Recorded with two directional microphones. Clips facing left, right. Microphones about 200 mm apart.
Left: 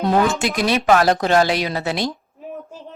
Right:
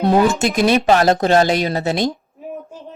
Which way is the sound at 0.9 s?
25° right (ahead or behind).